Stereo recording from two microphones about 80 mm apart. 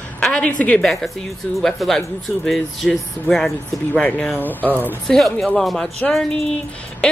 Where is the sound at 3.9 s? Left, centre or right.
Centre.